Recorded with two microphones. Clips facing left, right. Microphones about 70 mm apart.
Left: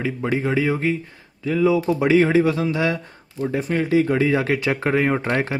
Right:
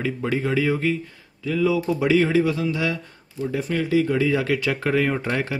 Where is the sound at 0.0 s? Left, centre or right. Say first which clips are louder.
Left 2 dB; centre.